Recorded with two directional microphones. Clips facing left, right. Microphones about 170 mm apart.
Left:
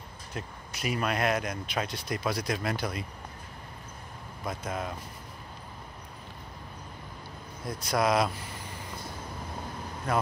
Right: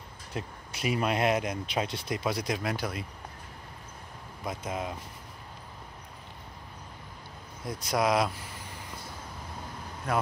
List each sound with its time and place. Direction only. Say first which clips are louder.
0.3 s speech: right 2 dB; 25° right (ahead or behind)
2.7 s speech: left 1 dB; 5° right (ahead or behind)
4.5 s speech: even; 15° right (ahead or behind)
7.6 s speech: even; 15° right (ahead or behind)